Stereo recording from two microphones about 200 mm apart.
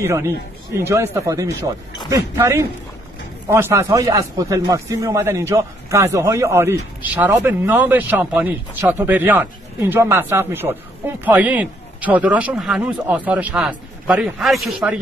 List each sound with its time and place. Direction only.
0.0 s speech: 15° right (ahead or behind)